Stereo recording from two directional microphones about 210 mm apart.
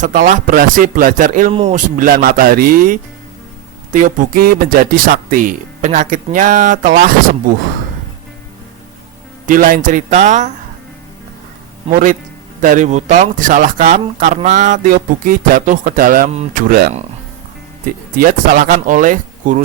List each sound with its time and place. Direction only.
0.0 s speech: 40° right (ahead or behind)
1.5 s speech: 25° right (ahead or behind)
2.0 s speech: 40° right (ahead or behind)
9.5 s speech: 40° right (ahead or behind)
11.9 s speech: 40° right (ahead or behind)
18.2 s speech: 40° right (ahead or behind)